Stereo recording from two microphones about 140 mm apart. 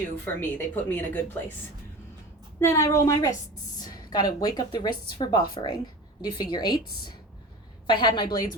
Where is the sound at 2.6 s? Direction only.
20° left (ahead or behind).